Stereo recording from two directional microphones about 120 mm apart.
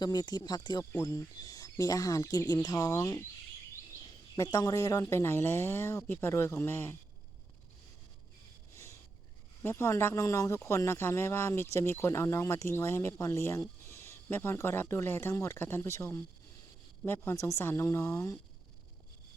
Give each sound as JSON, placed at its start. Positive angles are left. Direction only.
{"t": 0.0, "sound": "speech", "side_deg": 35}
{"t": 4.4, "sound": "speech", "side_deg": 30}
{"t": 8.7, "sound": "a sound", "side_deg": 25}
{"t": 9.6, "sound": "speech", "side_deg": 25}